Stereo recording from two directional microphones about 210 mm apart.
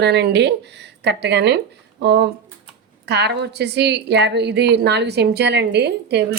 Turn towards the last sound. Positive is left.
turn(degrees=-50)  # may be behind; listen again after turning